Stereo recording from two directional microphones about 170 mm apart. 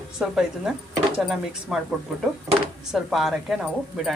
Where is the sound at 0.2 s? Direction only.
5° right (ahead or behind).